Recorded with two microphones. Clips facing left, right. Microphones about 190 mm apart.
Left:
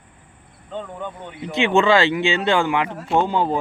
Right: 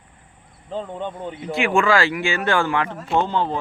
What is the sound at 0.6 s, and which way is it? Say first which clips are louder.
Speech: right 2 dB; 30° right (ahead or behind).